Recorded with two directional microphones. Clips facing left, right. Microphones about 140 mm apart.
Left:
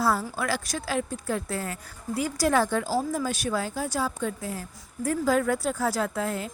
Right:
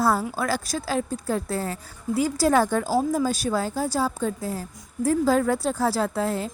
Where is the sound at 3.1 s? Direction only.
35° right (ahead or behind).